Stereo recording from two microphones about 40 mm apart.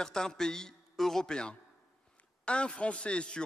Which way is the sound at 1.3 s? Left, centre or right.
Left.